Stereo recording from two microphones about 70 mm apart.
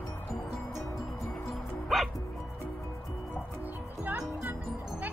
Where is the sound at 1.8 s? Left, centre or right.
Centre.